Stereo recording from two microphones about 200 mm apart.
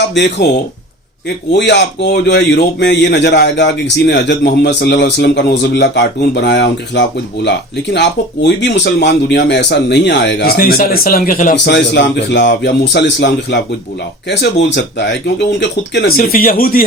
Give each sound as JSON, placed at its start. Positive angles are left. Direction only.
{"t": 1.5, "sound": "speech", "side_deg": 60}
{"t": 11.5, "sound": "speech", "side_deg": 60}